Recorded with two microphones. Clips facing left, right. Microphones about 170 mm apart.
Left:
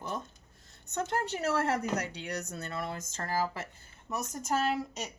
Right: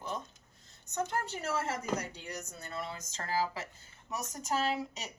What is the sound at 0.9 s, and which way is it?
Speech, 65° left (ahead or behind).